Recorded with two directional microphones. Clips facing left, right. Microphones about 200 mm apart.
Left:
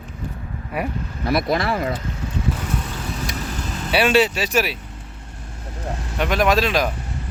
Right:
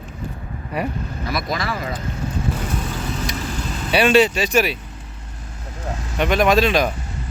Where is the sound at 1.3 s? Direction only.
60° left (ahead or behind).